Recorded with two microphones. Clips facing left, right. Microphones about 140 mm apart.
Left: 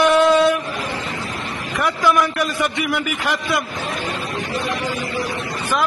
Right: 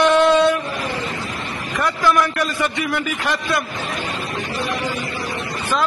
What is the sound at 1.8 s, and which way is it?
A man's voice, 15° left (ahead or behind).